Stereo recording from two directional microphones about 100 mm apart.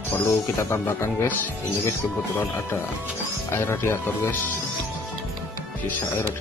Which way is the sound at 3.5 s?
25° left (ahead or behind).